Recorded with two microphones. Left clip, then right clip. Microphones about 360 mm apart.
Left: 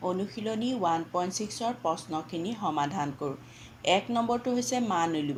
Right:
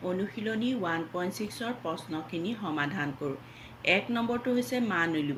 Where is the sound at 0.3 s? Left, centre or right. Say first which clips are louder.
Left 1 dB; centre.